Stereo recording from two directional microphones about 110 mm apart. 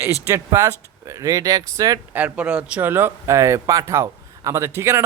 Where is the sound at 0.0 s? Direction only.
25° right (ahead or behind).